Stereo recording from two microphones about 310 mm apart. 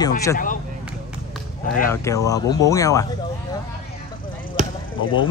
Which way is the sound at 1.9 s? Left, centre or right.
Centre.